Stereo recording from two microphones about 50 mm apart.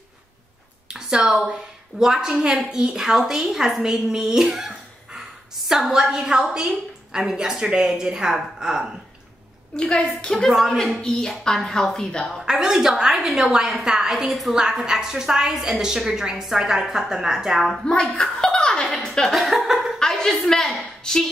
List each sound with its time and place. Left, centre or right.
0.8 s a sound: centre
2.0 s a woman's voice: centre
9.8 s speech: centre
10.3 s a woman's voice: centre
12.4 s a woman's voice: centre
18.2 s laughter: centre
20.0 s a sound: centre